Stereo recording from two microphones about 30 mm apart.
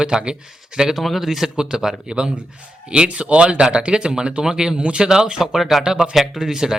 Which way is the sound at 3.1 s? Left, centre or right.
Right.